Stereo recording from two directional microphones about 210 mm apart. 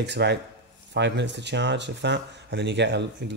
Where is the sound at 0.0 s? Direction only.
55° right (ahead or behind).